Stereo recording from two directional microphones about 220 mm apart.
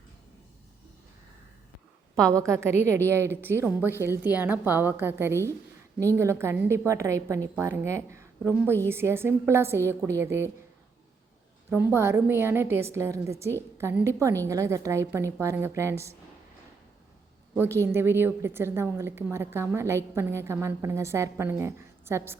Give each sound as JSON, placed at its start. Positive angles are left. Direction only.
{"t": 2.2, "sound": "a woman's voice", "side_deg": -15}
{"t": 11.7, "sound": "a woman's voice", "side_deg": -10}
{"t": 17.5, "sound": "a woman's voice", "side_deg": -10}